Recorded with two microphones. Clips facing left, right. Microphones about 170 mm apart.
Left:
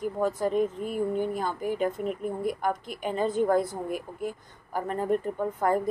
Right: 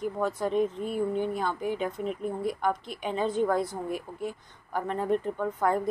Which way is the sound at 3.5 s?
50° left (ahead or behind).